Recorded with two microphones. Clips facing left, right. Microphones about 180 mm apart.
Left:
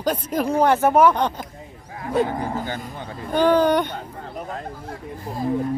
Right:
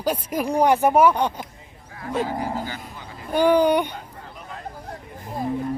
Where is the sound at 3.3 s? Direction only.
10° right (ahead or behind).